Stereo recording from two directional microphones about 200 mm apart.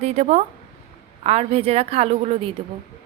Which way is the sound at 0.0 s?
35° right (ahead or behind).